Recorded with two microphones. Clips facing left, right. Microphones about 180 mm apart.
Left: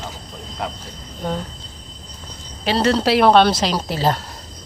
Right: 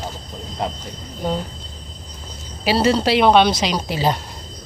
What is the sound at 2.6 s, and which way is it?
Speech, 5° right (ahead or behind).